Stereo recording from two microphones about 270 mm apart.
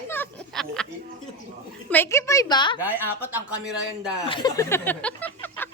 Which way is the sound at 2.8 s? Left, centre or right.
Centre.